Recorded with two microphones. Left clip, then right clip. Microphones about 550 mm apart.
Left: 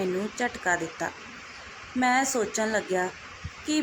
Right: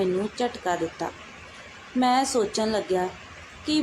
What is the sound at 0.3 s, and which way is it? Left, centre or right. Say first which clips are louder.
Speech: right 1 dB; right.